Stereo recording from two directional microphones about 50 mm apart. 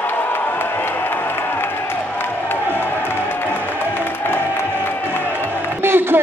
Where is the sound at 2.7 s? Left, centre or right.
Left.